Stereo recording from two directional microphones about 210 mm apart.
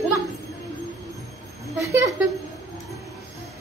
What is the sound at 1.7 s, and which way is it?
Speech, 15° right (ahead or behind).